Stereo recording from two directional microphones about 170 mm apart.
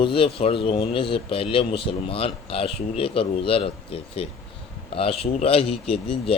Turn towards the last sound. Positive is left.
turn(degrees=35)  # may be behind; listen again after turning